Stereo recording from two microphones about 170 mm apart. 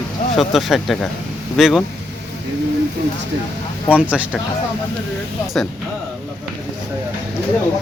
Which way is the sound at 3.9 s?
5° right (ahead or behind).